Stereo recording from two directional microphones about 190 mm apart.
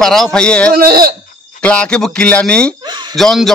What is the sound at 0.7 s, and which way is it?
Speech, 50° right (ahead or behind).